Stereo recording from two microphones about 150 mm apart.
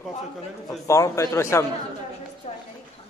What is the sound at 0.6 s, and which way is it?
A man's voice, 20° left (ahead or behind).